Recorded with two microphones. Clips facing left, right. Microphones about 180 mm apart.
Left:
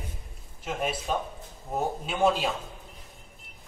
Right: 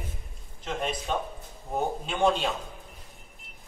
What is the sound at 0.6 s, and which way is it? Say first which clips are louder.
Speech: left 1 dB; 5° left (ahead or behind).